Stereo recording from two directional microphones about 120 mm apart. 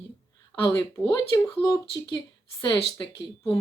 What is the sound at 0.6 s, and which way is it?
Speech, 25° left (ahead or behind).